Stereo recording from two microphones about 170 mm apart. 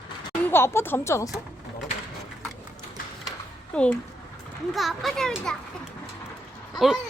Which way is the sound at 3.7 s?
5° left (ahead or behind).